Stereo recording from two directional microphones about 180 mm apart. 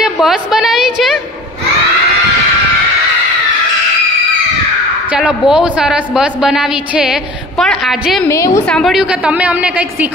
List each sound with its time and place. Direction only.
0.0 s a woman's voice: 5° right (ahead or behind)
5.1 s a woman's voice: 5° right (ahead or behind)
8.3 s a woman's voice: 15° left (ahead or behind)
8.6 s a woman's voice: centre (ahead or behind)